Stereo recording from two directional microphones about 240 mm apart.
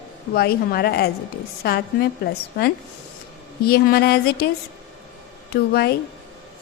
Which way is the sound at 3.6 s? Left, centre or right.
Left.